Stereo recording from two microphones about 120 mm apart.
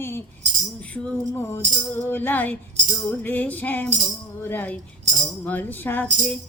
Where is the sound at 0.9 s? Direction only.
10° left (ahead or behind).